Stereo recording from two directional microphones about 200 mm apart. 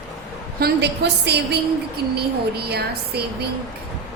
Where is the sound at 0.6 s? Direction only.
55° right (ahead or behind).